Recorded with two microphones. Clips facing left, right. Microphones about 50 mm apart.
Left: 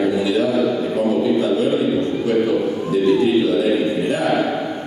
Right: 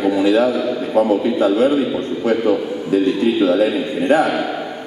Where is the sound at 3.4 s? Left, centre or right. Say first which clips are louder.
Right 1 dB; right.